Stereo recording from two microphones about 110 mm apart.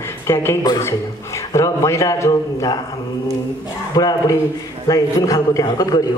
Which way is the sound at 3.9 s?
35° left (ahead or behind).